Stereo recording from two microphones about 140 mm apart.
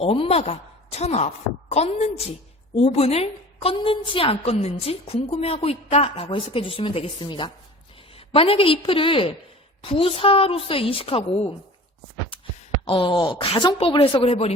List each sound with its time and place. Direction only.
0.0 s a woman's voice: 45° left (ahead or behind)
12.8 s a woman's voice: 40° left (ahead or behind)